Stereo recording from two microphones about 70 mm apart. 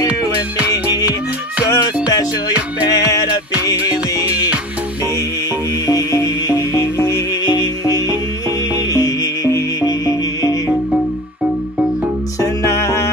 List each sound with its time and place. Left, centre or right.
2.9 s music: left
5.9 s music: left
7.4 s music: left
12.4 s music: left